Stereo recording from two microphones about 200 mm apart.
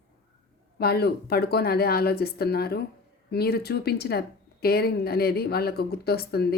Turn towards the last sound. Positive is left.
turn(degrees=50)  # may be behind; listen again after turning